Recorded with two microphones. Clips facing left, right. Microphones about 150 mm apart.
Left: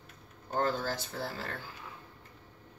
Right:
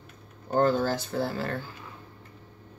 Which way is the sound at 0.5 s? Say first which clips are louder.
Right 8 dB; 60° right (ahead or behind).